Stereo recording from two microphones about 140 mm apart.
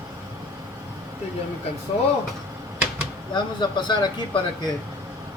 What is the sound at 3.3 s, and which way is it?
Speech, 35° left (ahead or behind).